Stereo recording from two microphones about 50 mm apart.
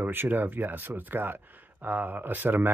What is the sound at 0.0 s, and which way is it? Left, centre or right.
Speech, right.